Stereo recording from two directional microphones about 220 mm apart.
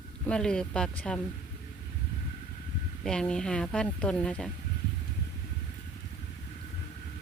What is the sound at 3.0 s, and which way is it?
Speech, 5° left (ahead or behind).